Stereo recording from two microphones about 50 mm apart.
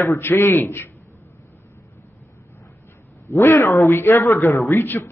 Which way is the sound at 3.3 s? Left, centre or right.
Left.